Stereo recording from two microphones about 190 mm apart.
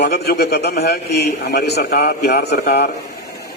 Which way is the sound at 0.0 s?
60° left (ahead or behind).